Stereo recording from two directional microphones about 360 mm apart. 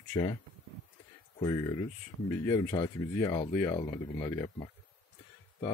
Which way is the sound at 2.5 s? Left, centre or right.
Centre.